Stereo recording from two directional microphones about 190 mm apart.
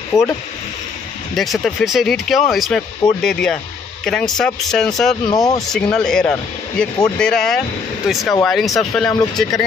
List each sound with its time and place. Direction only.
0.1 s speech: 5° right (ahead or behind)
1.3 s speech: centre (ahead or behind)
5.3 s speech: 20° left (ahead or behind)
5.7 s speech: 5° left (ahead or behind)